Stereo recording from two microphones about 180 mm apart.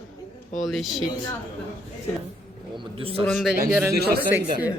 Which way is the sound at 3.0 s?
30° right (ahead or behind).